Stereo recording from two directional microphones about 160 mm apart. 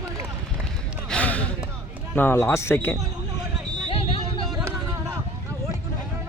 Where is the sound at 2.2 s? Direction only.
15° left (ahead or behind).